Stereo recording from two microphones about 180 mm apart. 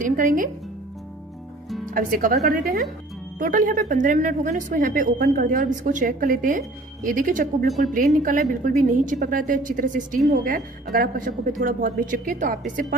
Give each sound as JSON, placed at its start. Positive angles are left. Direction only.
{"t": 0.0, "sound": "a woman's voice", "side_deg": -50}
{"t": 1.9, "sound": "a woman's voice", "side_deg": -50}